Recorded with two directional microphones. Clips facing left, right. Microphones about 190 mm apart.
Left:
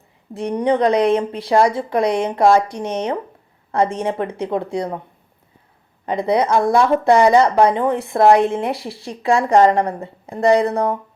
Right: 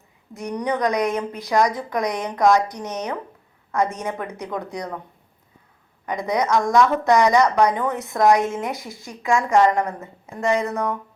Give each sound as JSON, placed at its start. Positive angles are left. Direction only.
{"t": 0.3, "sound": "a woman's voice", "side_deg": 30}
{"t": 6.1, "sound": "a woman's voice", "side_deg": 30}